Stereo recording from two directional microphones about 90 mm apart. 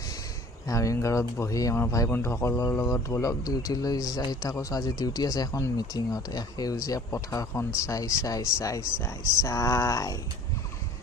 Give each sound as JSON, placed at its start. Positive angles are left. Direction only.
{"t": 0.7, "sound": "speech", "side_deg": 40}
{"t": 2.0, "sound": "speech", "side_deg": 25}